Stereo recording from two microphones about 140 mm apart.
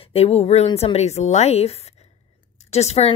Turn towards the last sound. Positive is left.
turn(degrees=50)  # may be behind; listen again after turning